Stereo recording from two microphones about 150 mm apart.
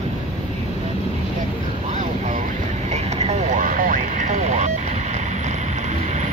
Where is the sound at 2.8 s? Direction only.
45° right (ahead or behind).